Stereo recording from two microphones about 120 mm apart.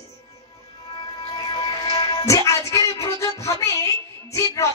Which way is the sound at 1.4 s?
35° left (ahead or behind).